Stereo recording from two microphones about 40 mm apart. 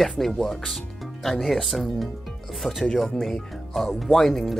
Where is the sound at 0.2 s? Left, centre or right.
Centre.